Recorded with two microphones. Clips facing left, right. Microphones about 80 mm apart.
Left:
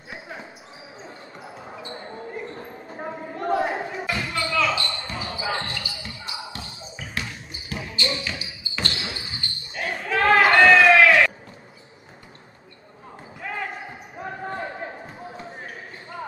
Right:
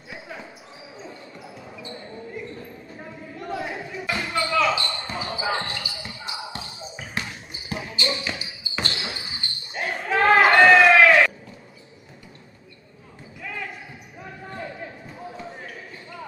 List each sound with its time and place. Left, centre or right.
0.1 s basketball bounce: left
4.2 s basketball bounce: centre
13.4 s basketball bounce: left
15.1 s basketball bounce: centre